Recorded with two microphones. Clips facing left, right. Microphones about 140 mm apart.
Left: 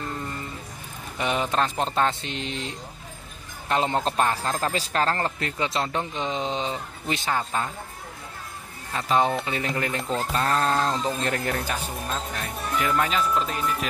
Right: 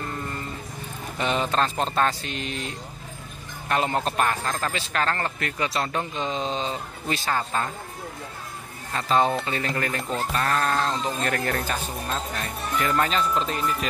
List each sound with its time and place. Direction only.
1.1 s a man's voice: 10° left (ahead or behind)
8.9 s a man's voice: 10° left (ahead or behind)
11.4 s speech: 10° left (ahead or behind)